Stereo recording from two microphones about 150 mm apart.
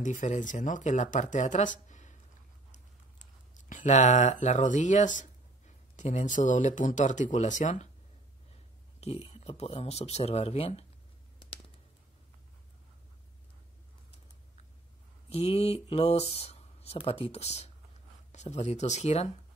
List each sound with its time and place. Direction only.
0.0 s speech: 55° left (ahead or behind)
2.7 s typing: 55° left (ahead or behind)
5.9 s speech: 50° left (ahead or behind)
9.0 s speech: 45° left (ahead or behind)
15.2 s speech: 40° left (ahead or behind)